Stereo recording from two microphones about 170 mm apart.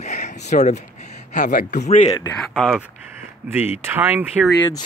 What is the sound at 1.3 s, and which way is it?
Speech, 50° left (ahead or behind).